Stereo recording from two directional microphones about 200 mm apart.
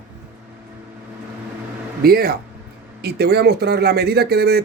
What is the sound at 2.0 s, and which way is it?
Speech, 50° right (ahead or behind).